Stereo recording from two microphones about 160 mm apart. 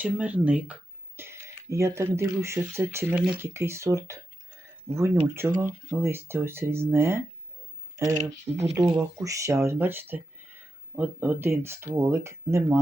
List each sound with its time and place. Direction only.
0.0 s speech: 10° right (ahead or behind)
8.1 s speech: 45° right (ahead or behind)
8.7 s speech: 20° right (ahead or behind)